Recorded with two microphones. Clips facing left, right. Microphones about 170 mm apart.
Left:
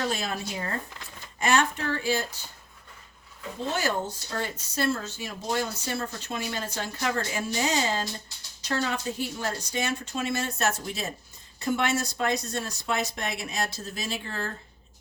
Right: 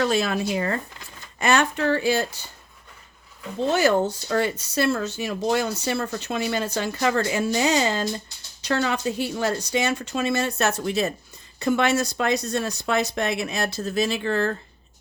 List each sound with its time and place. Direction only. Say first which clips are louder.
0.0 s speech: right 8 dB; 80° right
1.4 s speech: right 4 dB; 70° right (ahead or behind)
3.8 s speech: right 10 dB; 75° right (ahead or behind)